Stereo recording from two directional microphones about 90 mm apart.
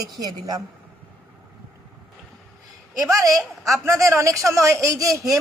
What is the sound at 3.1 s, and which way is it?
A woman's voice, 40° right (ahead or behind).